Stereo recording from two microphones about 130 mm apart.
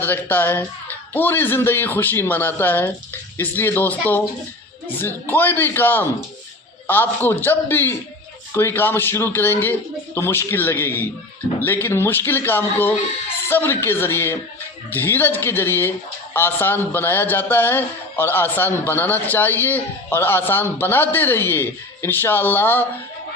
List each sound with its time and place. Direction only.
0.0 s a man's voice: 15° left (ahead or behind)